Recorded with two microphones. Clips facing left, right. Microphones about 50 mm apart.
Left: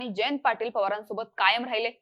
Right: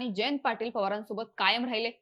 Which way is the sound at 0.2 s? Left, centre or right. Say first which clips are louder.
Left 5 dB; centre.